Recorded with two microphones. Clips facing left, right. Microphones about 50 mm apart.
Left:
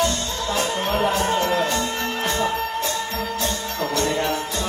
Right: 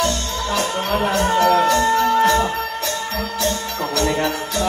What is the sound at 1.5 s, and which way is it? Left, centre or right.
Music, right.